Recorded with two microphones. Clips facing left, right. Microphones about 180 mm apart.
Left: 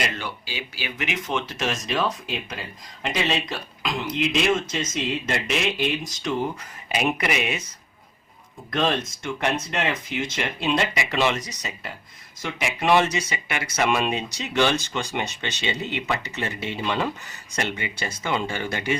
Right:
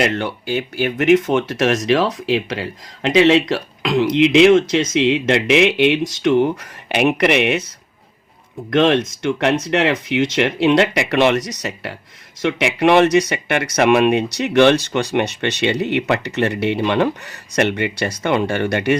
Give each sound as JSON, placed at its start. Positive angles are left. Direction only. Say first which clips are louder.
{"t": 0.0, "sound": "speech", "louder": "right 10 dB", "side_deg": -60}
{"t": 8.7, "sound": "speech", "louder": "right 9 dB", "side_deg": -75}